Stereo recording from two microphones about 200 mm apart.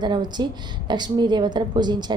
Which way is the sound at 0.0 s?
20° right (ahead or behind).